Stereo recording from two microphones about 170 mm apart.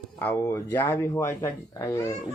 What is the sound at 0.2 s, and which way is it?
Speech, 15° left (ahead or behind).